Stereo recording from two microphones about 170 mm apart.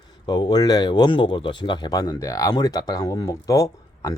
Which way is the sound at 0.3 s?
25° left (ahead or behind).